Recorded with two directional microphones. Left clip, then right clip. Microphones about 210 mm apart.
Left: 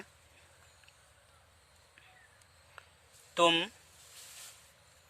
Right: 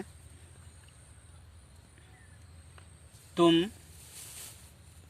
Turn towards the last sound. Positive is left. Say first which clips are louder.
# right 2 dB
turn(degrees=30)  # may be behind; listen again after turning